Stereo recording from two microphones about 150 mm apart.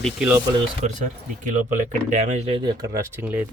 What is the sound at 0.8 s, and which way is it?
Speech, 50° right (ahead or behind).